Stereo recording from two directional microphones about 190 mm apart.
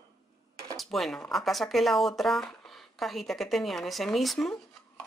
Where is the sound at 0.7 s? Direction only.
Centre (ahead or behind).